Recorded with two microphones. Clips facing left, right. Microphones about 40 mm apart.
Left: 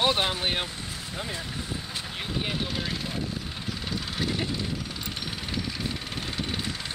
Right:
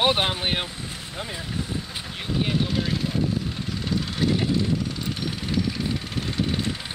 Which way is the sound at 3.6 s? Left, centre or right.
Centre.